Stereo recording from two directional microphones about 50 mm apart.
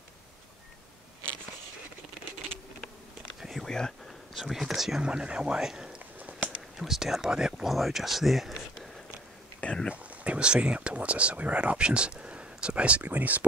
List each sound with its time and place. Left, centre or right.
3.3 s a sound: centre
3.6 s speech: centre
4.4 s speech: centre
5.0 s speech: centre
7.6 s speech: centre
9.8 s speech: right